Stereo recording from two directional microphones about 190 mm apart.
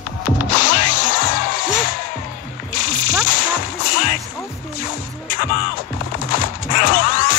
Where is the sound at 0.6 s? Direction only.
40° left (ahead or behind).